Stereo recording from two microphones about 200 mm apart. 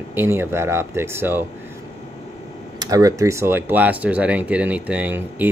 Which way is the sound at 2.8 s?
15° right (ahead or behind).